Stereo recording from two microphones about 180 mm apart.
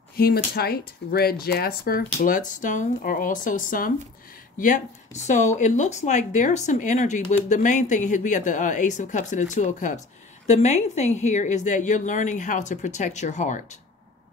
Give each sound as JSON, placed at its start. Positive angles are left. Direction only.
{"t": 0.1, "sound": "a woman's voice", "side_deg": 60}